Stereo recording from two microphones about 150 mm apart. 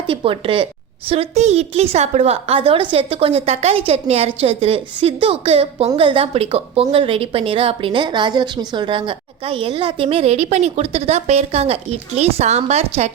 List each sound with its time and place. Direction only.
0.1 s a woman's voice: 35° right (ahead or behind)